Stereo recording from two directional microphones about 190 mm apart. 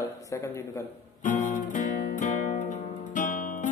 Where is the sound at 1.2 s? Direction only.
40° left (ahead or behind).